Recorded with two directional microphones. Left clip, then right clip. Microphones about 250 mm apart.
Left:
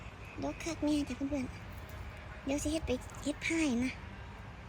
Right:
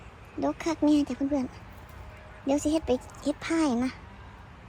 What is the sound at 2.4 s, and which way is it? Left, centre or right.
Speech, centre.